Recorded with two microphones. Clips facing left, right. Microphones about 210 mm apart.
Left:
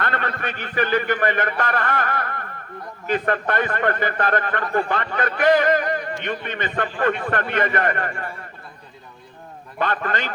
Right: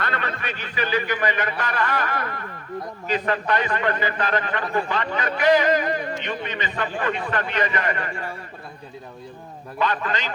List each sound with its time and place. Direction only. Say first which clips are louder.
0.0 s a man's voice: left 2 dB; 50° left (ahead or behind)
9.7 s a man's voice: left 1 dB; 50° left (ahead or behind)